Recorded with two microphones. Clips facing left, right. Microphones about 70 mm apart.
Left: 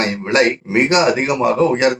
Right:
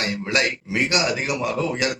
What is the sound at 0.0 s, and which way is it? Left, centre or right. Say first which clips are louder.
A man's voice: left 8 dB; left.